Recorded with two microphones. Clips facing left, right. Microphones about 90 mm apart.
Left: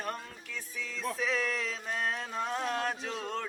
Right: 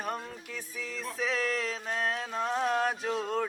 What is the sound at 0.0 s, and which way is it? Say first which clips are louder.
Music: right 3 dB; 5° right (ahead or behind).